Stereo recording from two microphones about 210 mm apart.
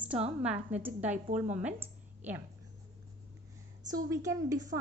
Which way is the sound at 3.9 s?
15° right (ahead or behind).